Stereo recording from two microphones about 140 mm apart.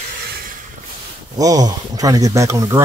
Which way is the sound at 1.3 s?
25° right (ahead or behind).